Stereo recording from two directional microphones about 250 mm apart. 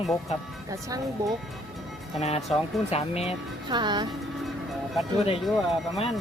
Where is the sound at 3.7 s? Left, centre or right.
Centre.